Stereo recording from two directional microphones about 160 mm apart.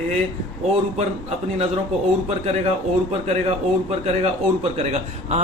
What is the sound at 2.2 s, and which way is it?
Speech, 40° right (ahead or behind).